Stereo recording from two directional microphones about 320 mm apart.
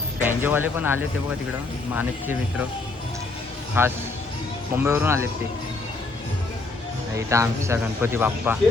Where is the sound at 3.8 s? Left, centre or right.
Centre.